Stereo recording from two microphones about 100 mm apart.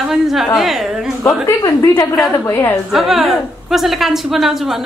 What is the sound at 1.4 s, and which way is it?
Speech, 30° left (ahead or behind).